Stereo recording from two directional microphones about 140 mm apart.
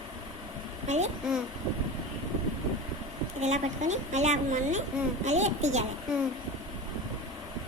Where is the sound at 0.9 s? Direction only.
55° right (ahead or behind).